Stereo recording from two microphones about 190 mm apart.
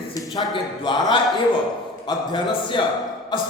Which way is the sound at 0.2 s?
20° left (ahead or behind).